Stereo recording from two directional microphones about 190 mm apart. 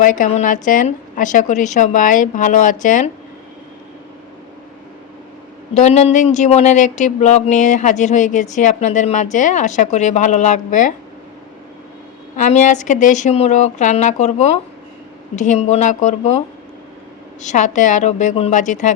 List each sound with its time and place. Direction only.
0.0 s speech: 45° left (ahead or behind)
5.7 s speech: 35° left (ahead or behind)
12.4 s speech: 40° left (ahead or behind)
17.4 s speech: 40° left (ahead or behind)